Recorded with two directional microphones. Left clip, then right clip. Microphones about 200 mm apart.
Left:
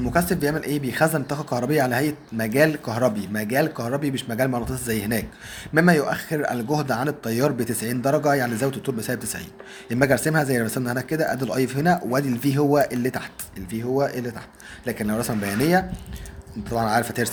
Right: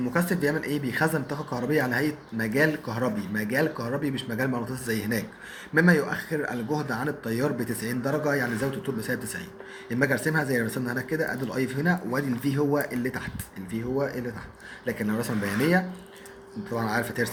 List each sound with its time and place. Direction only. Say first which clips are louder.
0.1 s speech: left 4 dB; 35° left (ahead or behind)